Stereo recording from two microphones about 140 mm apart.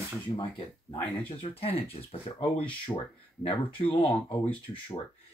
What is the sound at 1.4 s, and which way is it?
Speech, 45° left (ahead or behind).